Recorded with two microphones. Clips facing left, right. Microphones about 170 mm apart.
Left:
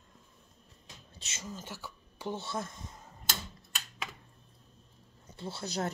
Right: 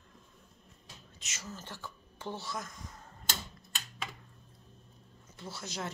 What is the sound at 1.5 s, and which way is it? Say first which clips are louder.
Speech: left 2 dB; 10° left (ahead or behind).